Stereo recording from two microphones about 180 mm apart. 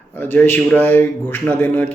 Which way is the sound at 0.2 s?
10° left (ahead or behind).